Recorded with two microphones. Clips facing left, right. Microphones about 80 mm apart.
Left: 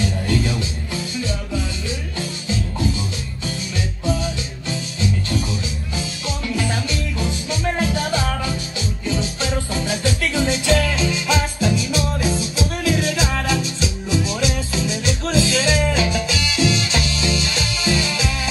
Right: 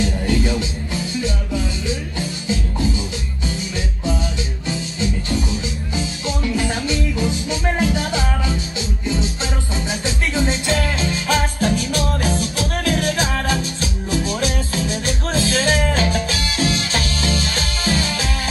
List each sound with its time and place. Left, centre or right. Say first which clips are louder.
0.3 s music: right 1 dB; right
5.9 s music: right 4 dB; right